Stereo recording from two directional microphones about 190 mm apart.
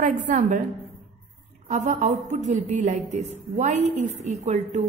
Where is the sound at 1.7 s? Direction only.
40° right (ahead or behind).